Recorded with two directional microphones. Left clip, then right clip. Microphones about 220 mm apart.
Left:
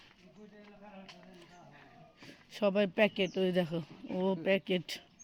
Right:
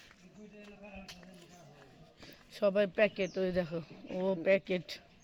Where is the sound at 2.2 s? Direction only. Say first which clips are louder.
Right 1 dB; 30° left (ahead or behind).